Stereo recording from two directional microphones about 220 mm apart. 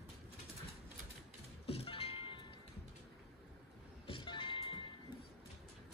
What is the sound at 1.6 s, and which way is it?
Music, 25° left (ahead or behind).